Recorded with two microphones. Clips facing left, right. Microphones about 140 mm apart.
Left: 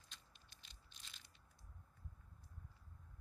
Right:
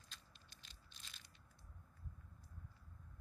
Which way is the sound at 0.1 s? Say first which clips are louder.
Right 1 dB; 20° left (ahead or behind).